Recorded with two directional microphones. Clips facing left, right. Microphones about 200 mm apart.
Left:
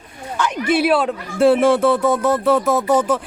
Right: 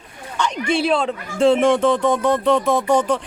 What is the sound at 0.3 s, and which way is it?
Speech, 5° left (ahead or behind).